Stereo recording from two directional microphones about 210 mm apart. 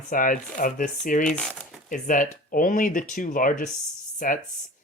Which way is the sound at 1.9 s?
40° left (ahead or behind).